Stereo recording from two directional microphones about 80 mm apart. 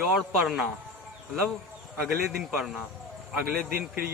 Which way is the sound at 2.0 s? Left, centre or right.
Centre.